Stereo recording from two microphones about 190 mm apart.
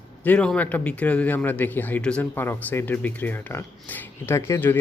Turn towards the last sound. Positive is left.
turn(degrees=10)  # may be behind; listen again after turning